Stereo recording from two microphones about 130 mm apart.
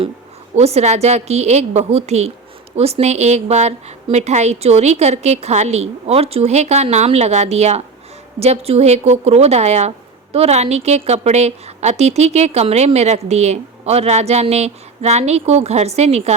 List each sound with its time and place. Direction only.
0.5 s a woman's voice: 55° right (ahead or behind)